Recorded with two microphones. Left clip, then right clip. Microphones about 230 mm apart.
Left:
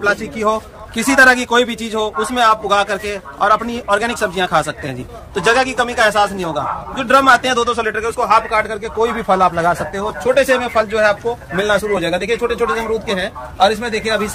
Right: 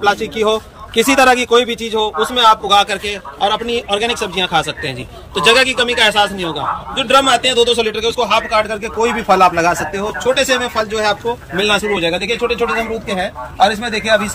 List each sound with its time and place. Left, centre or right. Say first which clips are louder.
0.0 s a man's voice: right 2 dB; centre
8.1 s speech: left 3 dB; left
10.2 s a man's voice: left 1 dB; centre
13.1 s a man's voice: right 1 dB; centre